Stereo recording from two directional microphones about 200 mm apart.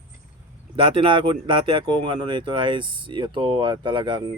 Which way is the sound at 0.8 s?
25° right (ahead or behind).